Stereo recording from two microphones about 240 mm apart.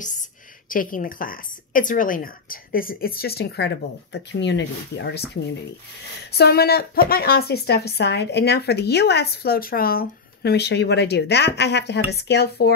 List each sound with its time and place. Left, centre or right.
0.7 s speech: left
6.3 s speech: left